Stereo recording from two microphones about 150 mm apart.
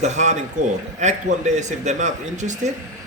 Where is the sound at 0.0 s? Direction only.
50° right (ahead or behind).